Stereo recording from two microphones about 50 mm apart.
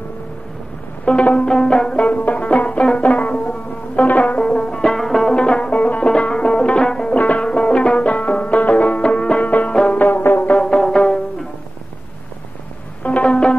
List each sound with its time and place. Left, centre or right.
1.0 s music: left
2.0 s music: left
4.4 s music: centre
6.0 s music: centre
7.2 s music: left
9.4 s music: left
10.6 s music: centre
13.0 s music: left